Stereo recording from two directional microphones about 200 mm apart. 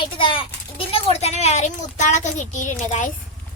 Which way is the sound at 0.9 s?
30° left (ahead or behind).